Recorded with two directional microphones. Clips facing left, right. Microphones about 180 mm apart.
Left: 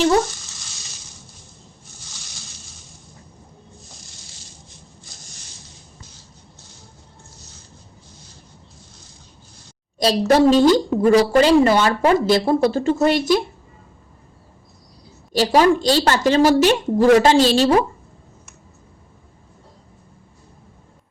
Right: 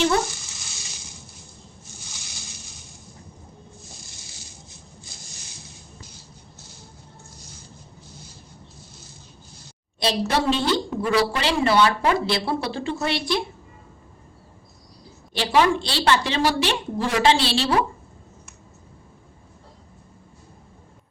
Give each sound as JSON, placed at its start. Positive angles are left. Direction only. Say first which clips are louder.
{"t": 10.0, "sound": "a woman's voice", "louder": "left 8 dB", "side_deg": 40}
{"t": 15.3, "sound": "a woman's voice", "louder": "left 5 dB", "side_deg": 40}